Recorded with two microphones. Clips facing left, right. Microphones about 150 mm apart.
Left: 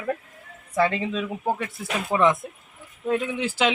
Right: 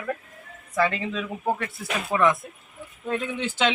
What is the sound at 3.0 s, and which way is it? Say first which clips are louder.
Speech: left 3 dB; 5° left (ahead or behind).